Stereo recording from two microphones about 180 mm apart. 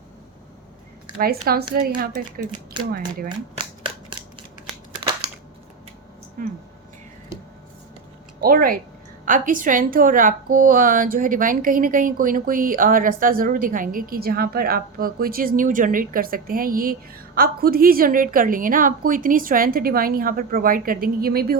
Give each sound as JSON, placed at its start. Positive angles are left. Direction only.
{"t": 1.2, "sound": "speech", "side_deg": -55}
{"t": 2.0, "sound": "a woman's voice", "side_deg": -45}
{"t": 2.8, "sound": "speech", "side_deg": -25}
{"t": 3.2, "sound": "shuffling cards", "side_deg": -30}
{"t": 8.4, "sound": "a woman's voice", "side_deg": -55}